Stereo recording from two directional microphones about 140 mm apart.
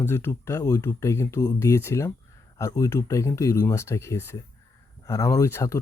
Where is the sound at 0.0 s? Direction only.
15° left (ahead or behind).